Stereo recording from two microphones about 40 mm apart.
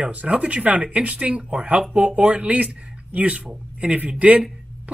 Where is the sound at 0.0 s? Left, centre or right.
Right.